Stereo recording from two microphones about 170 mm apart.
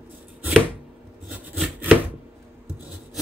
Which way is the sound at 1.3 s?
5° right (ahead or behind).